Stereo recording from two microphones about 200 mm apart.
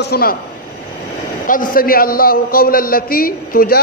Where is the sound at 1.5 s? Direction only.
45° left (ahead or behind).